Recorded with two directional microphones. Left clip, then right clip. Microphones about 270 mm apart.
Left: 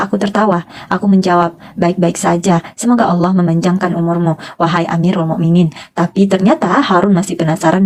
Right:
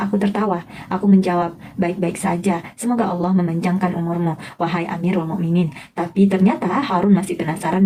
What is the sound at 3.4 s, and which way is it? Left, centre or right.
Speech, left.